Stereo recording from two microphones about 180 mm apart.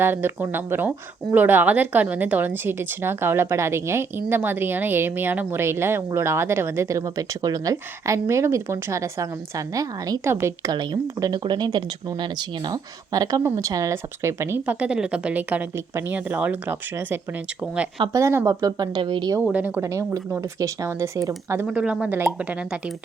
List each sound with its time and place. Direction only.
0.0 s speech: 10° right (ahead or behind)
19.5 s speech: 10° right (ahead or behind)